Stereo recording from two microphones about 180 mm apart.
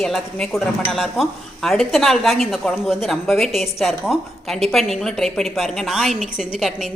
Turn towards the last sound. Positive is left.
turn(degrees=0)  # may be behind; listen again after turning